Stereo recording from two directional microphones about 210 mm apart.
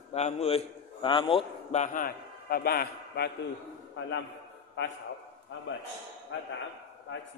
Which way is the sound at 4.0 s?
60° left (ahead or behind).